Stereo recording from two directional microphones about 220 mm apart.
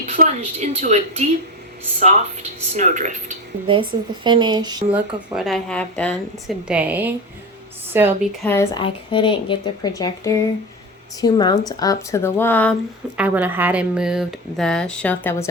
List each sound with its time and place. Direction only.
0.2 s speech: 35° right (ahead or behind)
3.7 s speech: 20° right (ahead or behind)
4.9 s a woman's voice: centre (ahead or behind)
8.4 s speech: 10° left (ahead or behind)
8.8 s speech: 20° left (ahead or behind)
13.1 s speech: 5° right (ahead or behind); by 15.4 s 10° left (ahead or behind)